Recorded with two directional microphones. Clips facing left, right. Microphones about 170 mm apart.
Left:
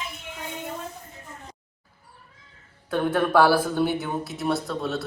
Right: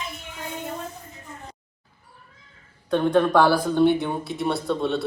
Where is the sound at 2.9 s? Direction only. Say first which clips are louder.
Right 3 dB; 5° left (ahead or behind).